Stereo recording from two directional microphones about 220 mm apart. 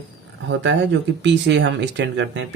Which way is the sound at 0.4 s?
55° right (ahead or behind).